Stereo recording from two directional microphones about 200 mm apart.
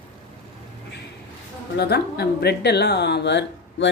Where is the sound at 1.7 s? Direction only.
55° left (ahead or behind).